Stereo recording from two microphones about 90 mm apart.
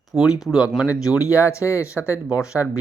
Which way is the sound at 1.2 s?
35° left (ahead or behind).